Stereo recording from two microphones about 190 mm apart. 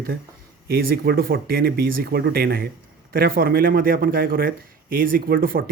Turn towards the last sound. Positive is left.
turn(degrees=-50)  # may be behind; listen again after turning